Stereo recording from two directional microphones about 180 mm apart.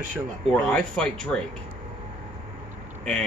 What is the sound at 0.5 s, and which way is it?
Speech, 5° left (ahead or behind).